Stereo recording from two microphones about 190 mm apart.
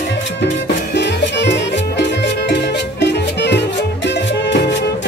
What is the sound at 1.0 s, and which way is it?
Music, 65° left (ahead or behind).